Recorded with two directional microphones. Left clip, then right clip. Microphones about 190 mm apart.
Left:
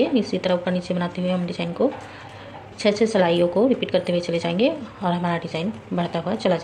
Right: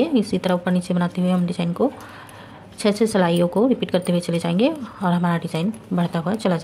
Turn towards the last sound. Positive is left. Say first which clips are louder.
# left 1 dB
turn(degrees=-40)  # may be behind; listen again after turning